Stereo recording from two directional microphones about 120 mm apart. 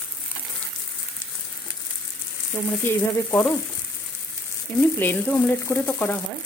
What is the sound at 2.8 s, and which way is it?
Speech, 15° left (ahead or behind).